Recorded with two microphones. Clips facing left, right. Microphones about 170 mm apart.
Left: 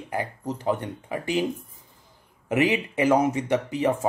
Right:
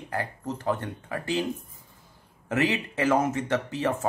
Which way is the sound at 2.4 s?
15° left (ahead or behind).